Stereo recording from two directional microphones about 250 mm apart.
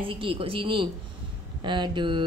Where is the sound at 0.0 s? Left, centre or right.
Right.